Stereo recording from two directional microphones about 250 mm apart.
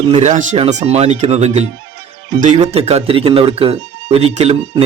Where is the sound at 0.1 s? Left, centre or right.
Right.